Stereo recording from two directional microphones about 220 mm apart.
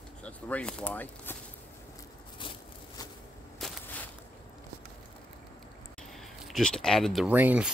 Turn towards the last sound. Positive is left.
turn(degrees=-5)  # may be behind; listen again after turning